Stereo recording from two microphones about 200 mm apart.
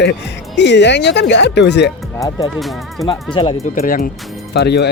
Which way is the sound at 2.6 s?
Centre (ahead or behind).